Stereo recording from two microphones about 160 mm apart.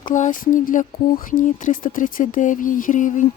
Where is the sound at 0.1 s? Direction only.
55° left (ahead or behind).